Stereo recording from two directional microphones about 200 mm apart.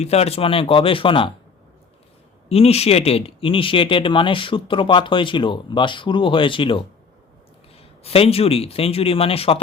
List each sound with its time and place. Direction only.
0.0 s speech: 30° left (ahead or behind)
2.5 s speech: 30° left (ahead or behind)
8.0 s speech: 30° left (ahead or behind)